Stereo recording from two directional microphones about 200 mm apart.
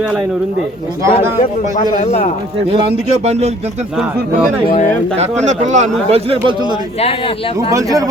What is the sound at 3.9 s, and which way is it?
Speech, 5° right (ahead or behind).